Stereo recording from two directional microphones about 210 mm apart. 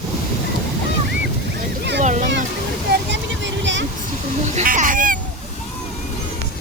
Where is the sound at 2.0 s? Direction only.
35° right (ahead or behind).